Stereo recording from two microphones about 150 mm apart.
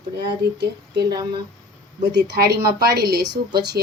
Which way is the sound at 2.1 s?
90° right.